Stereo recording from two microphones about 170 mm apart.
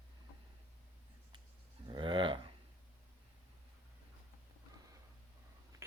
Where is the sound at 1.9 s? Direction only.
30° right (ahead or behind).